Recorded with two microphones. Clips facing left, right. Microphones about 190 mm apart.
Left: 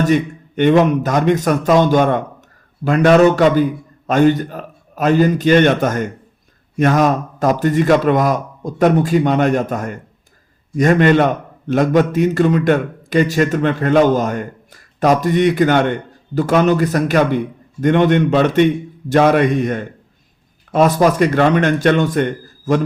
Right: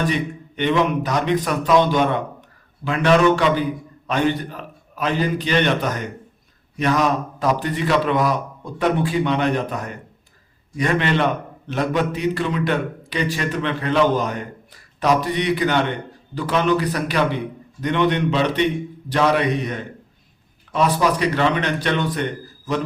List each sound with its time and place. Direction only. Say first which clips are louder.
0.0 s a man's voice: left 7 dB; 50° left (ahead or behind)